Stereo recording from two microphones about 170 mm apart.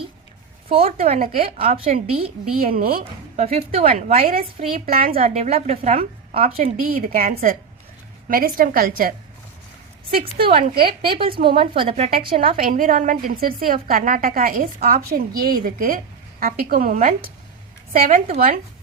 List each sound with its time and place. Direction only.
0.7 s a woman's voice: 35° right (ahead or behind)
1.7 s a woman's voice: 35° right (ahead or behind)
2.6 s a woman's voice: 55° right (ahead or behind)
2.9 s a woman's voice: 35° right (ahead or behind)
4.4 s a woman's voice: 60° right (ahead or behind)
5.3 s a woman's voice: 40° right (ahead or behind)
5.7 s a woman's voice: 50° right (ahead or behind)
6.8 s a woman's voice: 55° right (ahead or behind)
8.3 s a woman's voice: 60° right (ahead or behind)
10.4 s a woman's voice: 30° right (ahead or behind)
12.5 s a woman's voice: 55° right (ahead or behind)